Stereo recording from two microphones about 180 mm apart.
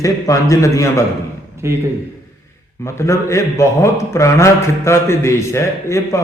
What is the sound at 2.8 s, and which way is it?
A man's voice, 15° left (ahead or behind).